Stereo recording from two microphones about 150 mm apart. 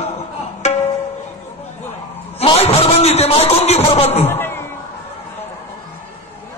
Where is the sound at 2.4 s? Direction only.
40° left (ahead or behind).